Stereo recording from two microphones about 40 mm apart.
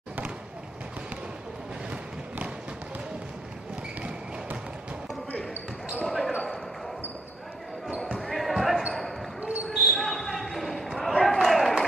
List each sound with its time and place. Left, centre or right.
6.0 s basketball bounce: centre
8.2 s basketball bounce: centre
9.4 s basketball bounce: right
9.7 s basketball bounce: centre